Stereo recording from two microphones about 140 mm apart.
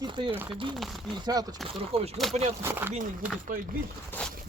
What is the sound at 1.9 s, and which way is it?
Speech, 45° right (ahead or behind).